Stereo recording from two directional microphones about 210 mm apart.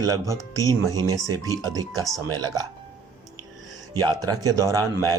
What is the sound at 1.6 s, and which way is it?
Speech, 15° right (ahead or behind).